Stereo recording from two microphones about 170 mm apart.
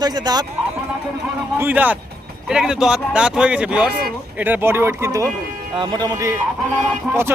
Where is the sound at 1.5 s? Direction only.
10° right (ahead or behind).